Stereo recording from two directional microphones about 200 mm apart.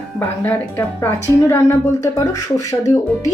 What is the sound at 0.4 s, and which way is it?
Speech, 10° left (ahead or behind).